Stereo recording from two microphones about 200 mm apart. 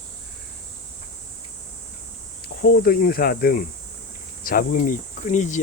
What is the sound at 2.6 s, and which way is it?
Speech, 50° left (ahead or behind).